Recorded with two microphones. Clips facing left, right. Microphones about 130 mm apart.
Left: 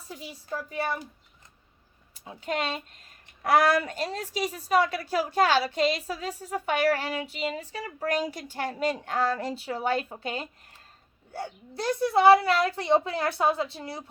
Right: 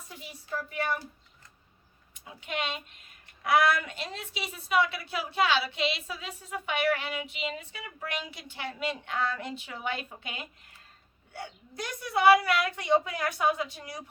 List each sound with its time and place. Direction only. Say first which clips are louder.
0.1 s speech: left 2 dB; 35° left (ahead or behind)
2.1 s a woman's voice: left 5 dB; 35° left (ahead or behind)